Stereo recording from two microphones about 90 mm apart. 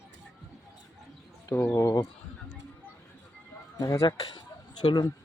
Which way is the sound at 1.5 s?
20° left (ahead or behind).